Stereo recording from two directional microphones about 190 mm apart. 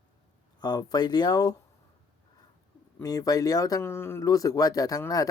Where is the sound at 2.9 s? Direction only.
20° left (ahead or behind).